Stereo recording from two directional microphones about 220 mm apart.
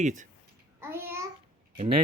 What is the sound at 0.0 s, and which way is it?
Speech, 35° right (ahead or behind).